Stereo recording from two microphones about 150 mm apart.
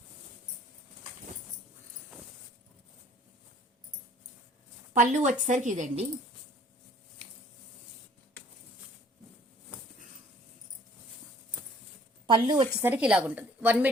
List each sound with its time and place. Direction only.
4.9 s a woman's voice: 55° right (ahead or behind)
12.2 s a woman's voice: 30° right (ahead or behind)
12.8 s a woman's voice: 10° right (ahead or behind)